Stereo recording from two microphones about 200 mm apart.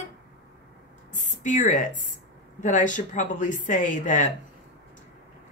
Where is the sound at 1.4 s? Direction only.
40° left (ahead or behind).